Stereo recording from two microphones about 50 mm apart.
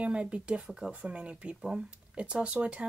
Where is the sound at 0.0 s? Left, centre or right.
Right.